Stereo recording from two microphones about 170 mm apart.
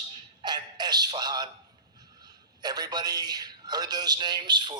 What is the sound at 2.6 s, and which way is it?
A man's voice, 25° right (ahead or behind).